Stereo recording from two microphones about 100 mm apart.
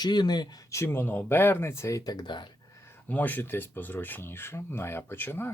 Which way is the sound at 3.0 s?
15° left (ahead or behind).